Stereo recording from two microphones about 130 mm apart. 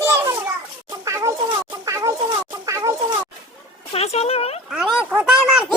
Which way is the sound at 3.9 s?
55° left (ahead or behind).